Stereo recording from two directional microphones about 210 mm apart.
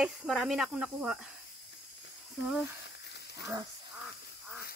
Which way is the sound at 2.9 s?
55° left (ahead or behind).